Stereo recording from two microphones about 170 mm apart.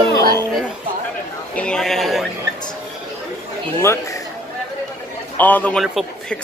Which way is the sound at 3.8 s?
15° left (ahead or behind).